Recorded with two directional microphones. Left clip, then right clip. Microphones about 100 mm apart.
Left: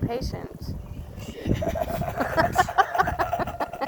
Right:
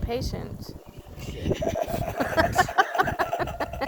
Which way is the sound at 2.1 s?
25° right (ahead or behind).